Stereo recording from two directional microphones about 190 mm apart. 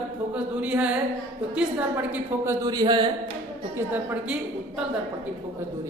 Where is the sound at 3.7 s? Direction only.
10° right (ahead or behind).